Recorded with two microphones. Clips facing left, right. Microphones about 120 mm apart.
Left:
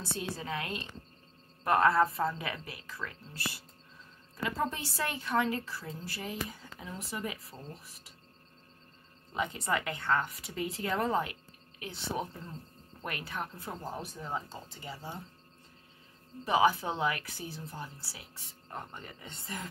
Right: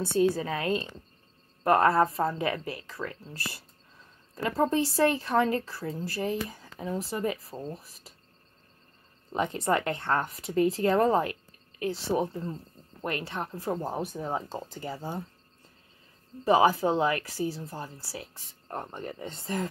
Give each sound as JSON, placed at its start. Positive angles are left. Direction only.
{"t": 0.0, "sound": "a woman's voice", "side_deg": -45}
{"t": 4.6, "sound": "a woman's voice", "side_deg": -35}
{"t": 9.3, "sound": "a woman's voice", "side_deg": -40}
{"t": 13.7, "sound": "speech", "side_deg": -50}
{"t": 16.4, "sound": "a woman's voice", "side_deg": -40}